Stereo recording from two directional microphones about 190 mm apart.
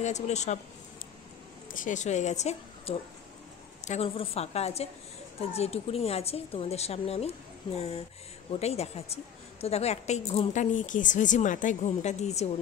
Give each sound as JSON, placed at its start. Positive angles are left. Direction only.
{"t": 0.0, "sound": "a woman's voice", "side_deg": 35}
{"t": 1.7, "sound": "a woman's voice", "side_deg": 45}
{"t": 8.5, "sound": "a woman's voice", "side_deg": 35}